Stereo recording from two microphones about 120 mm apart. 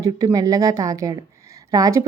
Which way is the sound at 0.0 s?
30° right (ahead or behind).